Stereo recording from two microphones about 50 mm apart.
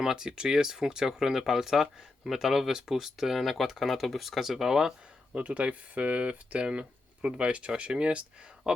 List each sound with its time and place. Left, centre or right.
0.0 s speech: centre
5.3 s speech: right